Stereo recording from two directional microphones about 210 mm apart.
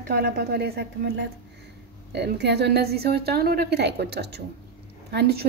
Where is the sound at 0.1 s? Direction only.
45° right (ahead or behind).